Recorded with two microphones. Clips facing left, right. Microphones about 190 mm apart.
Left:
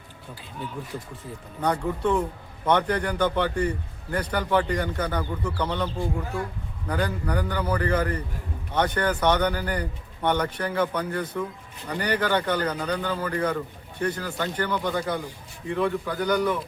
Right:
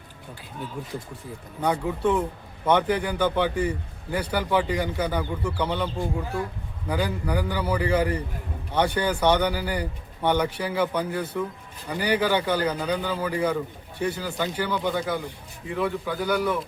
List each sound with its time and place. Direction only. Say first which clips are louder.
1.6 s a man's voice: right 1 dB; 5° right (ahead or behind)